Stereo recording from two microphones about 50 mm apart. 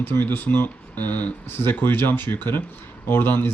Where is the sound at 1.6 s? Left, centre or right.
Left.